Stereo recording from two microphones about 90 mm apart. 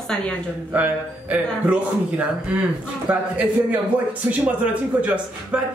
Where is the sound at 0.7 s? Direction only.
15° right (ahead or behind).